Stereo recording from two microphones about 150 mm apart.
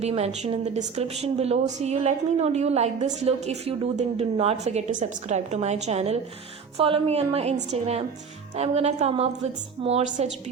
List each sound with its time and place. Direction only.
0.0 s a woman's voice: 45° right (ahead or behind)